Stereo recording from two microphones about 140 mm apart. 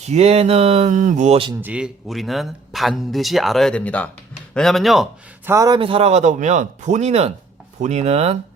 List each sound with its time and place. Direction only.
0.0 s speech: 50° right (ahead or behind)
1.6 s speech: 5° right (ahead or behind)
5.5 s a man's voice: 25° right (ahead or behind)
5.8 s speech: 45° right (ahead or behind)